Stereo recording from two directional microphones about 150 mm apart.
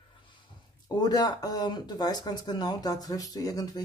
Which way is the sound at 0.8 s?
25° left (ahead or behind).